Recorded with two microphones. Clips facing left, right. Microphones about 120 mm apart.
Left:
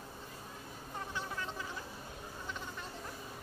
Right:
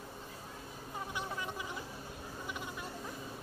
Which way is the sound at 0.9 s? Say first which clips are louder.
Right 1 dB; 15° right (ahead or behind).